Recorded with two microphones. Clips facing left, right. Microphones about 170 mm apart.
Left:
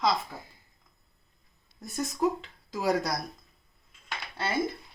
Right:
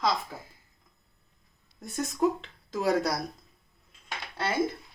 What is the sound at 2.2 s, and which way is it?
Speech, centre (ahead or behind).